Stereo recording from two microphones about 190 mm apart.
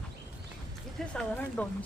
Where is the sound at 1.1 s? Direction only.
5° left (ahead or behind).